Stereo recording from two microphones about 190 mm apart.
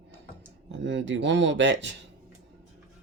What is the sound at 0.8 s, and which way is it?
Speech, 75° right (ahead or behind).